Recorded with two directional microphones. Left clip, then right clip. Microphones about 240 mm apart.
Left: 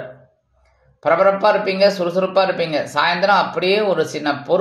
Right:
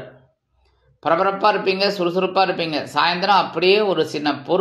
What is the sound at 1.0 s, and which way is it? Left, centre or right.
A man's voice, right.